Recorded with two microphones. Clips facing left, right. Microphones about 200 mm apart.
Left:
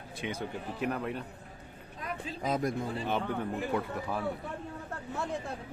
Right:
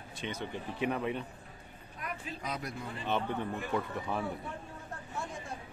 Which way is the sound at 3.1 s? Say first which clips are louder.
Right 2 dB; 10° left (ahead or behind).